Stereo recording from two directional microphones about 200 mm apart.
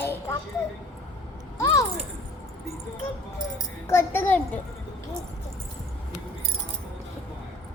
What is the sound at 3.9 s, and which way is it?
Speech, 10° left (ahead or behind).